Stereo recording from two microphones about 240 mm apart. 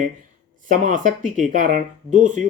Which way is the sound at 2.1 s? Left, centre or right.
Right.